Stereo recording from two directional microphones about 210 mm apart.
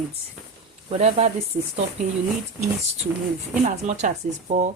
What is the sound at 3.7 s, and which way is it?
Speech, 35° right (ahead or behind).